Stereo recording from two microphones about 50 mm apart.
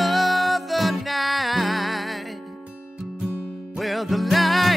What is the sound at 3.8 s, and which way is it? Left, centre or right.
Music, centre.